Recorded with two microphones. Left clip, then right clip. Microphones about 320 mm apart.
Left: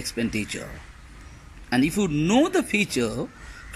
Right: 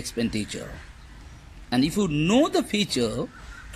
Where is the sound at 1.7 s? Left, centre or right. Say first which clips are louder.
Left 1 dB; centre.